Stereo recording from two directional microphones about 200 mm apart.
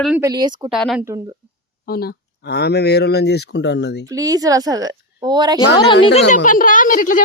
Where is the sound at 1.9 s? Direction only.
50° left (ahead or behind).